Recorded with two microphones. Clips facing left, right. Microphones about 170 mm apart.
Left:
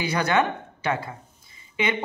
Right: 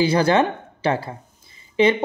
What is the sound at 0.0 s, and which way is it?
Speech, 30° right (ahead or behind).